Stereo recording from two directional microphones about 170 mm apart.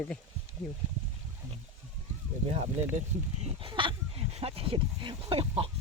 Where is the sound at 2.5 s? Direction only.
40° right (ahead or behind).